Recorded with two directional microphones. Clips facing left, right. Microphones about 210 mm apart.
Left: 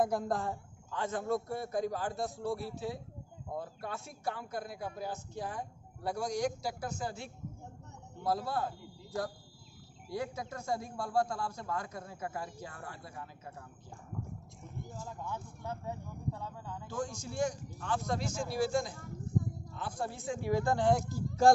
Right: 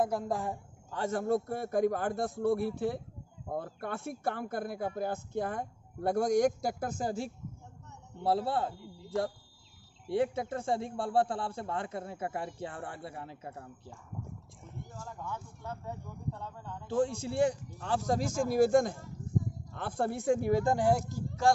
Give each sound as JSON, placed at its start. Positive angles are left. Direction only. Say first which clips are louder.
{"t": 0.0, "sound": "speech", "louder": "even", "side_deg": -10}
{"t": 0.9, "sound": "a man's voice", "louder": "right 4 dB", "side_deg": -45}
{"t": 8.2, "sound": "a man's voice", "louder": "right 4 dB", "side_deg": -30}
{"t": 10.0, "sound": "a man's voice", "louder": "right 8 dB", "side_deg": -30}
{"t": 15.2, "sound": "speech", "louder": "even", "side_deg": 15}
{"t": 16.9, "sound": "a man's voice", "louder": "right 9 dB", "side_deg": -30}
{"t": 20.6, "sound": "speech", "louder": "right 1 dB", "side_deg": -10}